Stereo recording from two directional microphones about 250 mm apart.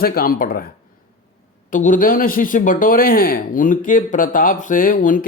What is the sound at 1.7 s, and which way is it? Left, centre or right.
Speech, left.